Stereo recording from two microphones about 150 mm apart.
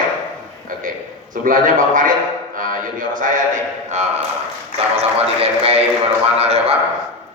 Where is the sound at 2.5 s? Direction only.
65° right (ahead or behind); by 6.8 s 45° right (ahead or behind).